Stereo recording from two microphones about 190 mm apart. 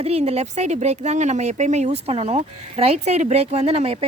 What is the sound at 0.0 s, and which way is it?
Speech, 35° right (ahead or behind).